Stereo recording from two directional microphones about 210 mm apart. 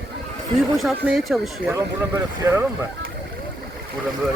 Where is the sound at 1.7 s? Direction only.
15° right (ahead or behind).